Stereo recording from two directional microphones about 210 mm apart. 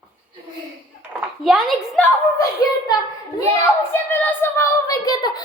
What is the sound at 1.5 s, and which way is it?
A woman's voice, centre (ahead or behind).